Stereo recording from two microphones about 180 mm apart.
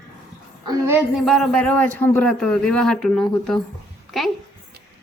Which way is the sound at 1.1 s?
Centre (ahead or behind).